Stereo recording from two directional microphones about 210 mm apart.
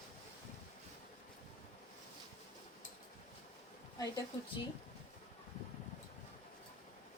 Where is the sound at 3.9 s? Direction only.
20° left (ahead or behind).